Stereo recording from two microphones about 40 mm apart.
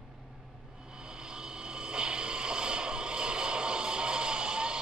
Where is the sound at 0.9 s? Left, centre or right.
Right.